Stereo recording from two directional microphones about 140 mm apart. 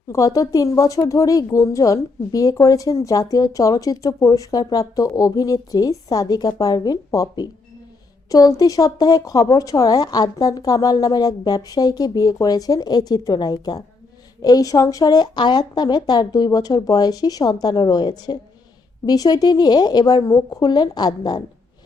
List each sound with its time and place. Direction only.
0.1 s speech: 25° left (ahead or behind)